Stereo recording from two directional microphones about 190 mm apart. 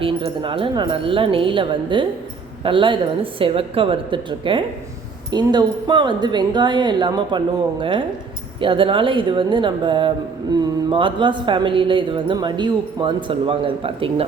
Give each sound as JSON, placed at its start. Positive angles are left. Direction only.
{"t": 0.0, "sound": "speech", "side_deg": -25}